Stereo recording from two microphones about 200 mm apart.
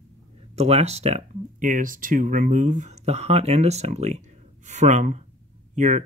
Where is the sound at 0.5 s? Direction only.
30° right (ahead or behind).